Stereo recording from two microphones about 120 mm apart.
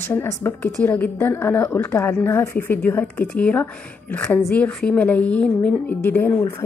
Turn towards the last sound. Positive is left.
turn(degrees=25)  # may be behind; listen again after turning